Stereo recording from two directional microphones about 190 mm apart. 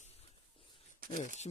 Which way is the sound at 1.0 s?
50° right (ahead or behind).